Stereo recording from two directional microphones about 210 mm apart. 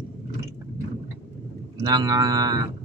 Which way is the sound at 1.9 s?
15° right (ahead or behind).